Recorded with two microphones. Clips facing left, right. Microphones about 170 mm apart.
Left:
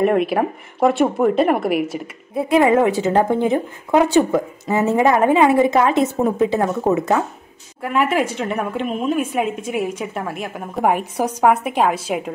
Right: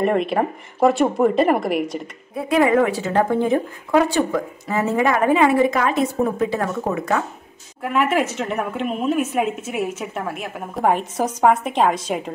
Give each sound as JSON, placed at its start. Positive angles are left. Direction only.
{"t": 0.0, "sound": "speech", "side_deg": 5}
{"t": 2.3, "sound": "a woman's voice", "side_deg": 25}
{"t": 7.8, "sound": "a woman's voice", "side_deg": 0}